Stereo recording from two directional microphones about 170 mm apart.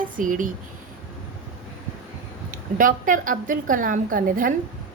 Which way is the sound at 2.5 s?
50° right (ahead or behind).